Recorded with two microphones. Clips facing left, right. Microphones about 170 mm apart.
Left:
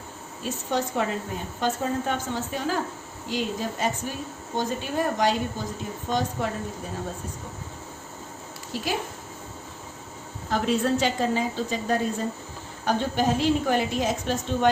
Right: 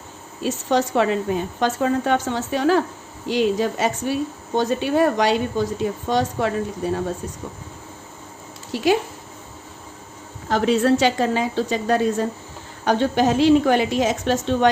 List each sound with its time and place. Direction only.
0.4 s speech: 85° right
8.7 s speech: 75° right (ahead or behind)
10.5 s speech: 85° right